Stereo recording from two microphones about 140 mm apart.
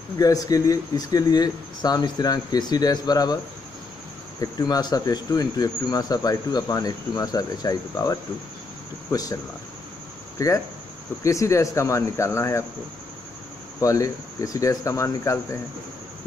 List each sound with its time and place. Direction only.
0.2 s speech: 25° left (ahead or behind)
4.4 s speech: 30° left (ahead or behind)
10.4 s speech: 25° left (ahead or behind)
13.7 s speech: 25° left (ahead or behind)